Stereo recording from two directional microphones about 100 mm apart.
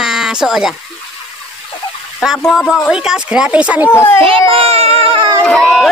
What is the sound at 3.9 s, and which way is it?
Speech, 25° left (ahead or behind).